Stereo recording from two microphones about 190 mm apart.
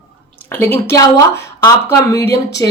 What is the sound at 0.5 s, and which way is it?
A woman's voice, 10° left (ahead or behind).